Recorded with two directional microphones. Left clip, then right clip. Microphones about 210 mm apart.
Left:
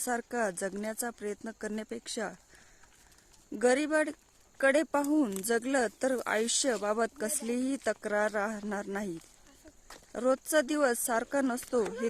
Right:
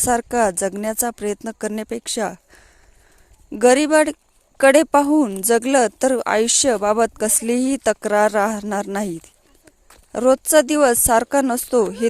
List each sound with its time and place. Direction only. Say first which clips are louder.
0.0 s speech: right 14 dB; 35° right (ahead or behind)
3.6 s speech: right 13 dB; 35° right (ahead or behind)